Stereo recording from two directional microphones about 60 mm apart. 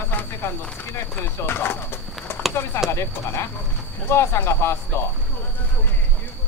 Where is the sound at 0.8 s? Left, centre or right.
Left.